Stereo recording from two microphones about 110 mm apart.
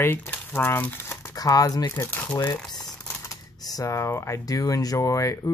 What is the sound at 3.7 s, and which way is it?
Speech, 30° left (ahead or behind).